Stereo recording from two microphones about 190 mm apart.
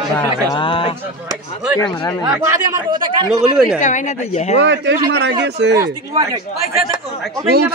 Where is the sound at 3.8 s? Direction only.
40° left (ahead or behind).